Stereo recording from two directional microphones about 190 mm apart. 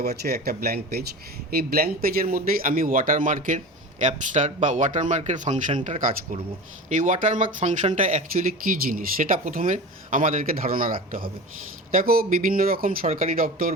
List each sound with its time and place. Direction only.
0.0 s speech: 55° right (ahead or behind)